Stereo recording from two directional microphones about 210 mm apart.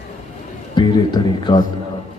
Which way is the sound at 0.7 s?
20° left (ahead or behind).